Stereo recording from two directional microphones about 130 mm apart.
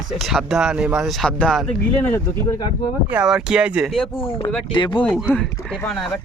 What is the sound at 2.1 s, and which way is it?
Speech, 20° left (ahead or behind).